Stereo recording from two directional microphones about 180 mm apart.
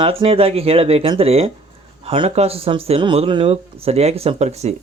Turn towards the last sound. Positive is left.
turn(degrees=-35)  # may be behind; listen again after turning